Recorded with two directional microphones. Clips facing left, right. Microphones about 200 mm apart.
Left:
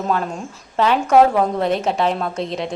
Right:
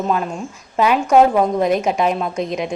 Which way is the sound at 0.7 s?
10° right (ahead or behind).